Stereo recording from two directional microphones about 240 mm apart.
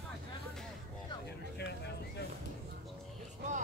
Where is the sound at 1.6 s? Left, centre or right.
Left.